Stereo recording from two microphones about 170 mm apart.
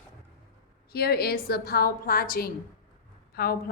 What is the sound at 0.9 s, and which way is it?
A woman's voice, 65° left (ahead or behind).